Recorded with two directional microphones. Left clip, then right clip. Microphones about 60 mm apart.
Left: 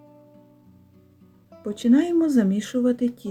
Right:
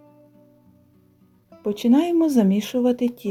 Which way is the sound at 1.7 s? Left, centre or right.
Right.